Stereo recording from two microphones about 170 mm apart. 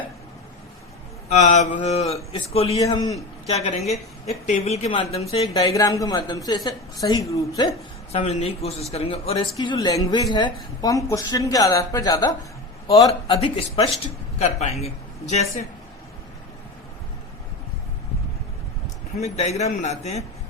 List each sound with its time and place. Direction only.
1.3 s a man's voice: 45° left (ahead or behind)
2.7 s a woman's voice: 20° left (ahead or behind)
3.4 s a woman's voice: 40° left (ahead or behind)
5.5 s a woman's voice: 20° left (ahead or behind)
8.1 s a man's voice: 40° left (ahead or behind)
9.6 s a woman's voice: 20° left (ahead or behind)
13.2 s a man's voice: 30° left (ahead or behind)
19.2 s a man's voice: 40° left (ahead or behind)